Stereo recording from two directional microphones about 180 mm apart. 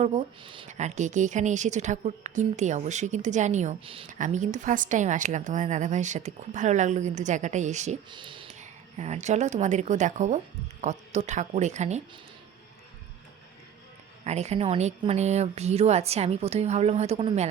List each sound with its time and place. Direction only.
0.0 s speech: 35° right (ahead or behind)
0.7 s speech: 40° right (ahead or behind)
8.1 s speech: 25° right (ahead or behind)
8.5 s speech: 40° right (ahead or behind)
14.3 s speech: 40° right (ahead or behind)